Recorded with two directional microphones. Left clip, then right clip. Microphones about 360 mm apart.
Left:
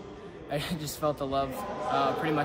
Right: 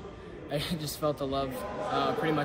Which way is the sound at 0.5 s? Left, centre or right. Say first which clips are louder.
Even; centre.